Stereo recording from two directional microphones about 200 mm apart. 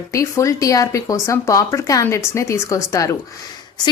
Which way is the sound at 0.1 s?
15° left (ahead or behind).